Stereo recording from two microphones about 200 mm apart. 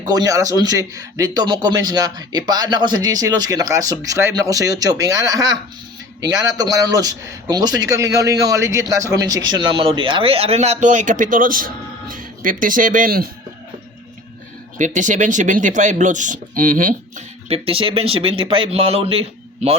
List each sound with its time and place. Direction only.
0.0 s speech: 20° right (ahead or behind); by 13.3 s 45° right (ahead or behind)
14.8 s speech: 40° right (ahead or behind)